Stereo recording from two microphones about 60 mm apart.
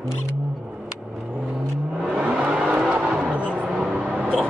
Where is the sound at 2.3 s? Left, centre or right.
Centre.